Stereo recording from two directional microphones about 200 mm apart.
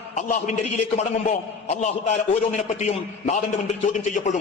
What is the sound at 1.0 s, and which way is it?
A man's voice, 35° left (ahead or behind).